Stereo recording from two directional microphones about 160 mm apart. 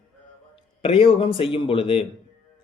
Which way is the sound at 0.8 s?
35° left (ahead or behind).